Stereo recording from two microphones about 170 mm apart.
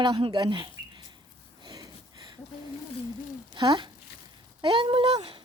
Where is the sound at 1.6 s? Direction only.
25° right (ahead or behind).